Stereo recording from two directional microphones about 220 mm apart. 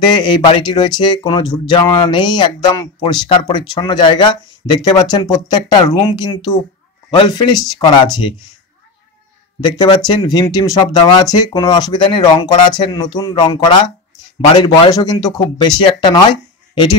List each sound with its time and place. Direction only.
0.0 s speech: 20° left (ahead or behind)
9.6 s speech: 20° left (ahead or behind)